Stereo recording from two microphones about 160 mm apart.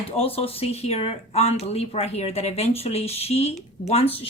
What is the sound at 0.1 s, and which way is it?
Speech, 35° left (ahead or behind).